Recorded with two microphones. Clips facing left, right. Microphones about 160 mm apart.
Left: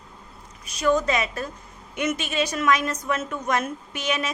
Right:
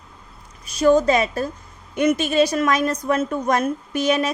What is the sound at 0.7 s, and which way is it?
A woman's voice, 30° right (ahead or behind).